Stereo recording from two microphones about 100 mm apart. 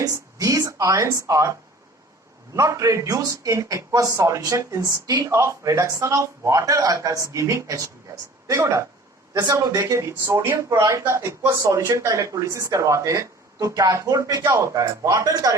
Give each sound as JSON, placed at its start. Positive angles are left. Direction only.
{"t": 0.0, "sound": "speech", "side_deg": -35}
{"t": 2.6, "sound": "speech", "side_deg": -35}
{"t": 9.9, "sound": "speech", "side_deg": -25}